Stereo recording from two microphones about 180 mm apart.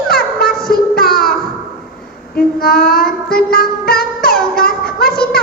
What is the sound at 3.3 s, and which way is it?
Music, 55° left (ahead or behind).